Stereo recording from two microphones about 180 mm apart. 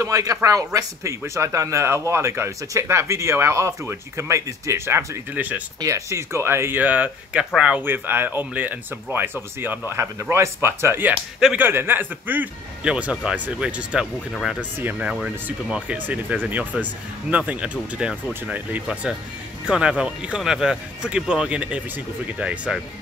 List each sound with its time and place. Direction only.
0.0 s speech: 20° right (ahead or behind)